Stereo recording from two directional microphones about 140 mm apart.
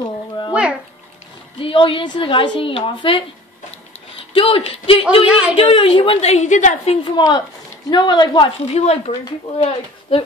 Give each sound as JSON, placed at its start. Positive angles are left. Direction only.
{"t": 0.5, "sound": "bathtub", "side_deg": -5}
{"t": 1.6, "sound": "a woman's voice", "side_deg": 40}
{"t": 4.3, "sound": "speech", "side_deg": 40}
{"t": 5.2, "sound": "a woman's voice", "side_deg": -5}
{"t": 5.6, "sound": "a woman's voice", "side_deg": 40}
{"t": 7.1, "sound": "a woman's voice", "side_deg": 35}
{"t": 8.6, "sound": "a woman's voice", "side_deg": 50}